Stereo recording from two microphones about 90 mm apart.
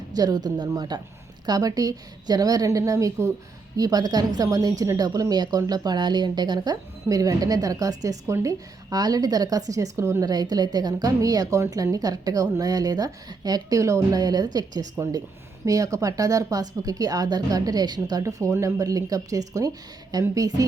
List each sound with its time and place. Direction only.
0.1 s speech: 45° right (ahead or behind)